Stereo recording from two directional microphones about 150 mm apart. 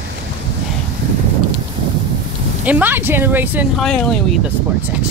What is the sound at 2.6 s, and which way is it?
Speech, 10° right (ahead or behind).